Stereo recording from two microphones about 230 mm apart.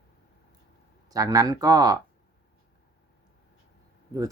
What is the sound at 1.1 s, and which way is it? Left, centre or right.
Speech, centre.